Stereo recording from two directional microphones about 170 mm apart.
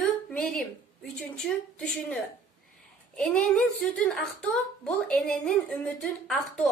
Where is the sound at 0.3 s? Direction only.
5° left (ahead or behind).